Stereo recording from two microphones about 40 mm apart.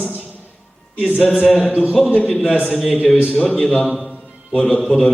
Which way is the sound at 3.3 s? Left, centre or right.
Centre.